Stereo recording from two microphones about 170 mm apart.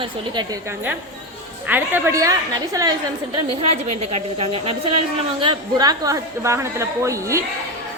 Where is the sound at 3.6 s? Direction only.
40° right (ahead or behind); by 7.4 s 15° right (ahead or behind).